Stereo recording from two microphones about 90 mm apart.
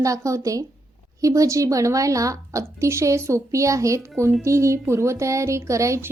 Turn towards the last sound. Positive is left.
turn(degrees=-35)  # may be behind; listen again after turning